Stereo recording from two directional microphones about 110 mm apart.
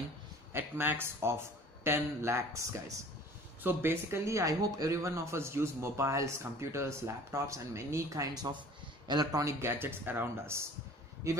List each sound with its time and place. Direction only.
0.5 s speech: 20° right (ahead or behind)